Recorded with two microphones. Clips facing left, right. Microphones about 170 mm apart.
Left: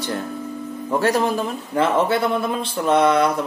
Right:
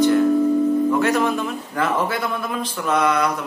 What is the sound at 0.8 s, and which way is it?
A man's voice, 35° left (ahead or behind).